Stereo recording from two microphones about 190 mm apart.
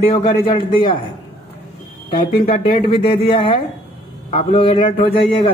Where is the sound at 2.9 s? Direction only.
30° left (ahead or behind).